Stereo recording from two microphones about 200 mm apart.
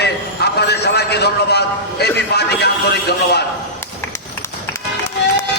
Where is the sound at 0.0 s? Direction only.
55° left (ahead or behind).